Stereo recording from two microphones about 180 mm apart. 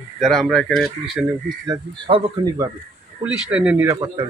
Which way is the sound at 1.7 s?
30° right (ahead or behind).